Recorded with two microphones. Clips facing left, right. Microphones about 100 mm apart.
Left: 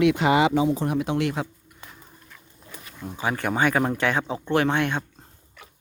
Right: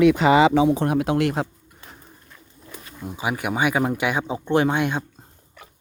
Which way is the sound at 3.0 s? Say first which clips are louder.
Even; 15° right (ahead or behind).